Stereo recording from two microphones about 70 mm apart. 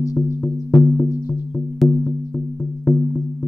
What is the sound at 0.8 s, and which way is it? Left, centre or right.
Music, left.